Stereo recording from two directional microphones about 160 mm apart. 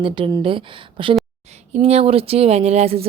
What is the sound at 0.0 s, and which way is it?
Speech, 30° right (ahead or behind).